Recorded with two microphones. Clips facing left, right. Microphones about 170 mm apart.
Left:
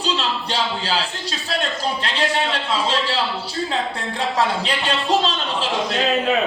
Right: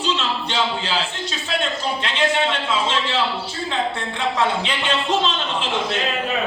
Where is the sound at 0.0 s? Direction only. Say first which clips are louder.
Even; 35° left (ahead or behind).